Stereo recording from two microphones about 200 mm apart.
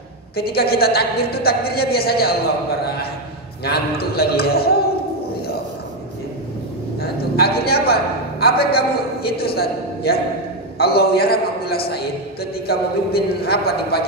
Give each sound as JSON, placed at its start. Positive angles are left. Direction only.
{"t": 0.4, "sound": "a woman's voice", "side_deg": 50}
{"t": 3.6, "sound": "a woman's voice", "side_deg": 50}
{"t": 7.0, "sound": "a man's voice", "side_deg": 50}